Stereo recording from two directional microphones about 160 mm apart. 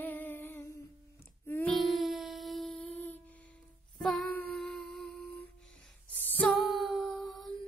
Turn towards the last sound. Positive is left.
turn(degrees=0)  # may be behind; listen again after turning